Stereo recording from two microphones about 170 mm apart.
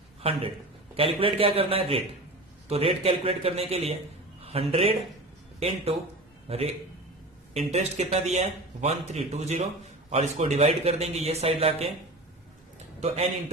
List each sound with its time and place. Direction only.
0.2 s a man's voice: 35° right (ahead or behind)